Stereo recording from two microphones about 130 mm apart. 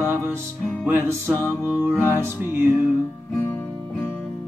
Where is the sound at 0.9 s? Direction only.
15° right (ahead or behind).